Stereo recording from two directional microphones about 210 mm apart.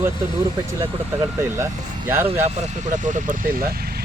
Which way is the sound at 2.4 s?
35° right (ahead or behind).